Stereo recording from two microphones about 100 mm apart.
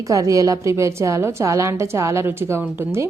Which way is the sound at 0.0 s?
35° right (ahead or behind).